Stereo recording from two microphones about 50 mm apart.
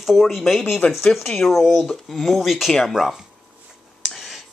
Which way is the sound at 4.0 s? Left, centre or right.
Centre.